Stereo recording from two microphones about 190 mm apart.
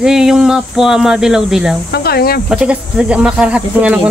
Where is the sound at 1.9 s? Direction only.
55° left (ahead or behind).